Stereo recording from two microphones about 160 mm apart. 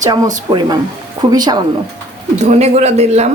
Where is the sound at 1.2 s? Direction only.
25° right (ahead or behind).